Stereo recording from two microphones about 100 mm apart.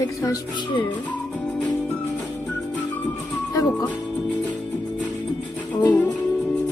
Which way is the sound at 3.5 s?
35° left (ahead or behind).